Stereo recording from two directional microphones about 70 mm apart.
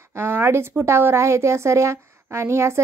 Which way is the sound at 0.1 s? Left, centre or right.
Right.